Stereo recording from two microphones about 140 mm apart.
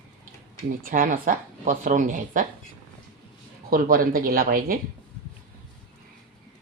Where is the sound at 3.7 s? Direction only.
85° right.